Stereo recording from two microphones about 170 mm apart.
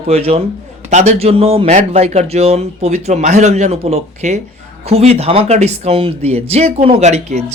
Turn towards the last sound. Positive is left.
turn(degrees=-40)  # may be behind; listen again after turning